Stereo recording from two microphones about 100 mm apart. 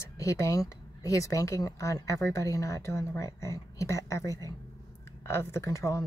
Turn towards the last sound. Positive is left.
turn(degrees=30)  # may be behind; listen again after turning